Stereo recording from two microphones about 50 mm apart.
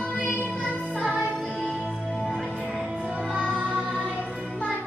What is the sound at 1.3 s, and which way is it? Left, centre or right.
Music, left.